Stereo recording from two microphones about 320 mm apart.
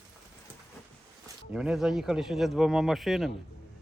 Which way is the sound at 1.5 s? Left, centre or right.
Centre.